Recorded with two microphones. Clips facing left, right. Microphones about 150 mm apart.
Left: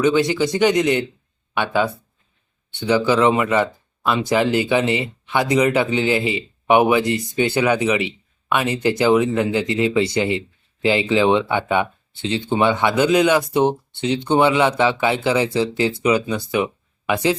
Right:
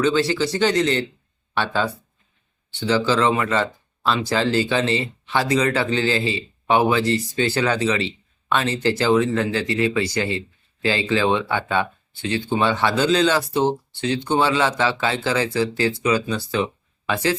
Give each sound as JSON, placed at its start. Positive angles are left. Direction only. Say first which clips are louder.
{"t": 0.0, "sound": "speech", "louder": "left 2 dB", "side_deg": 15}